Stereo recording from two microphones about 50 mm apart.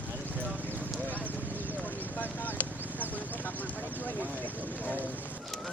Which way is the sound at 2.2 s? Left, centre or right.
Left.